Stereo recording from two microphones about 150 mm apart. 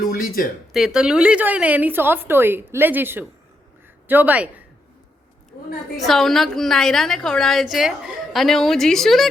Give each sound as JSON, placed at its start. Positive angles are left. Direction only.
{"t": 0.1, "sound": "speech", "side_deg": 75}
{"t": 0.7, "sound": "a woman's voice", "side_deg": -5}
{"t": 6.1, "sound": "a woman's voice", "side_deg": 0}